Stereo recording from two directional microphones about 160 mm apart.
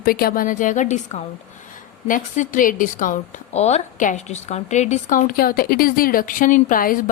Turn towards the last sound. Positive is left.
turn(degrees=60)  # may be behind; listen again after turning